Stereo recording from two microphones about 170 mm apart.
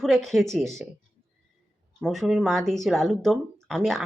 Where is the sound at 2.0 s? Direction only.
Centre (ahead or behind).